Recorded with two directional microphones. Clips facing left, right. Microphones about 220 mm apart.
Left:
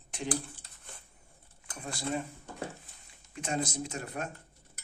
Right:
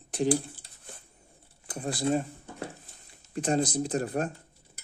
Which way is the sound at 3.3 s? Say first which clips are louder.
Right 7 dB; 35° right (ahead or behind).